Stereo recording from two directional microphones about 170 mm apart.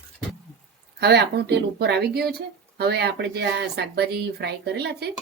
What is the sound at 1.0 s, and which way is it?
Speech, 75° right (ahead or behind).